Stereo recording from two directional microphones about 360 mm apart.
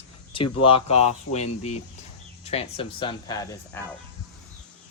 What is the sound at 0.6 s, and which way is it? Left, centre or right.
Speech, centre.